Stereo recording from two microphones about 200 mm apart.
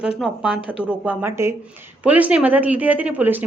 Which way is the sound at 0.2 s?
5° right (ahead or behind).